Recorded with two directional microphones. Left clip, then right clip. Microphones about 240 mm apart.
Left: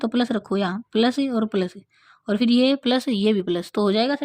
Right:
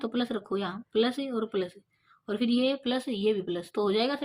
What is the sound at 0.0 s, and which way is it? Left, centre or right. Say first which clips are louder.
Speech: left 8 dB; left.